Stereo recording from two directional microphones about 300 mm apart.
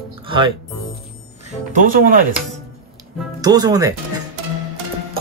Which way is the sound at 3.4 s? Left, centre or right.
Centre.